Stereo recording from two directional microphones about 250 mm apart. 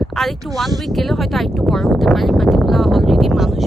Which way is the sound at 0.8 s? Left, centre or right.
Centre.